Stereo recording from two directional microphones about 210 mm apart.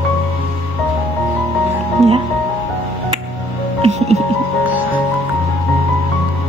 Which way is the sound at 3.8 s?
30° right (ahead or behind).